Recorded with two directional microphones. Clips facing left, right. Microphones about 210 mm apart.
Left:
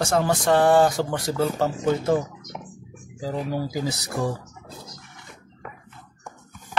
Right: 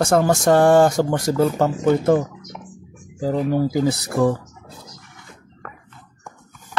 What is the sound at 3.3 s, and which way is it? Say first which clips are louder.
Speech: right 8 dB; 60° right (ahead or behind).